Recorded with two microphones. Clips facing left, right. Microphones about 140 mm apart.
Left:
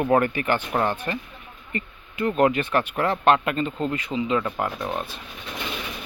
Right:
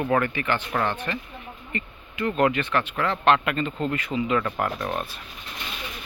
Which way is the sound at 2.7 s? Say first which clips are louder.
Left 2 dB; 40° left (ahead or behind).